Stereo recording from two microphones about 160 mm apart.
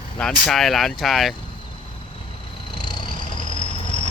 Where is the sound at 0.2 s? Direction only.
5° left (ahead or behind).